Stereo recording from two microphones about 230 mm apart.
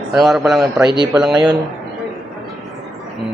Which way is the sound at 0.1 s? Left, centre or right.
Centre.